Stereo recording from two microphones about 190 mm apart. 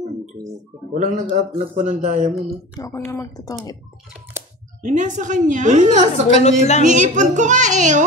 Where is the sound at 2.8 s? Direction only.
15° left (ahead or behind).